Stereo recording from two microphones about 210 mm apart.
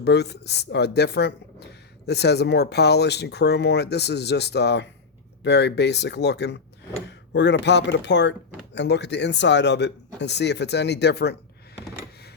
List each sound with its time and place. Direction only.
0.0 s speech: 55° left (ahead or behind)